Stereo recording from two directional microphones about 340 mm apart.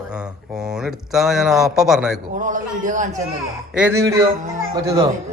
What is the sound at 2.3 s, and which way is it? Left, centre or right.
Speech, right.